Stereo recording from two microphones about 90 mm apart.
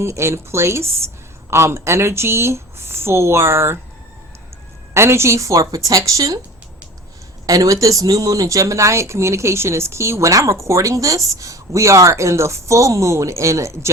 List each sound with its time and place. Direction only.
0.0 s speech: 30° right (ahead or behind)
4.9 s speech: 30° right (ahead or behind)
7.4 s speech: 40° right (ahead or behind)